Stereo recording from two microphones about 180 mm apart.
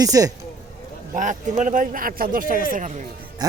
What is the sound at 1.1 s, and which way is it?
Speech, 45° right (ahead or behind).